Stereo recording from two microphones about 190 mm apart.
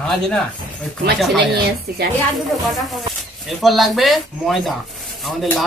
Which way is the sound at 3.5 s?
Centre (ahead or behind).